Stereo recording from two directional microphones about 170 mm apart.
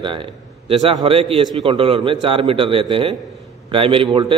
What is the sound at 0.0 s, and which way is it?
A man's voice, 30° right (ahead or behind).